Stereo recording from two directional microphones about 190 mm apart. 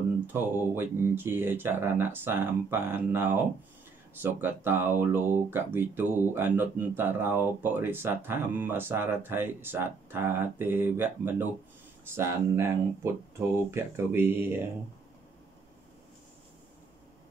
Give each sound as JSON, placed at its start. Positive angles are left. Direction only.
{"t": 0.3, "sound": "speech", "side_deg": -10}